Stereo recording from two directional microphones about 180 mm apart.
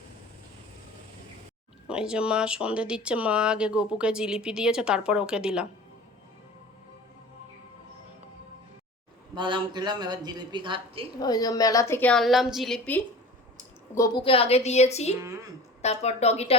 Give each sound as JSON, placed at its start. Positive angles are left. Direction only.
{"t": 1.9, "sound": "speech", "side_deg": -5}
{"t": 9.3, "sound": "a man's voice", "side_deg": -25}
{"t": 11.2, "sound": "a woman's voice", "side_deg": 20}
{"t": 13.9, "sound": "a woman's voice", "side_deg": 15}
{"t": 14.3, "sound": "a woman's voice", "side_deg": 35}